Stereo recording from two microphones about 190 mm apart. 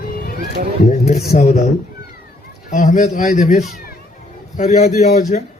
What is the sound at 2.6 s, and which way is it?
A man's voice, 40° left (ahead or behind).